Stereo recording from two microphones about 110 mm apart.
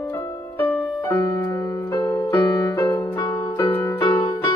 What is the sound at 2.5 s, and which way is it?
Music, 30° left (ahead or behind).